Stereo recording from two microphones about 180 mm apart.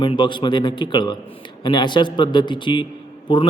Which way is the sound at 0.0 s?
25° left (ahead or behind).